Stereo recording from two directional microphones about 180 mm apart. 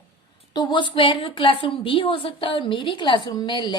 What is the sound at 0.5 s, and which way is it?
A woman's voice, 25° left (ahead or behind).